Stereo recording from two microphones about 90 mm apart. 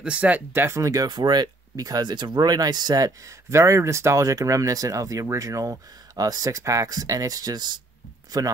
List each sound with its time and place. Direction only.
0.0 s speech: 15° right (ahead or behind); by 1.0 s 35° right (ahead or behind)
1.0 s speech: 55° right (ahead or behind)